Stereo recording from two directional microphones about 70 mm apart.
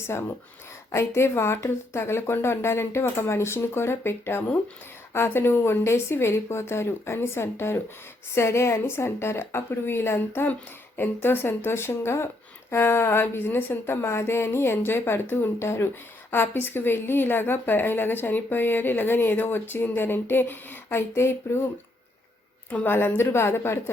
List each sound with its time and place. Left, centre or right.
0.1 s a woman's voice: left
22.7 s a woman's voice: left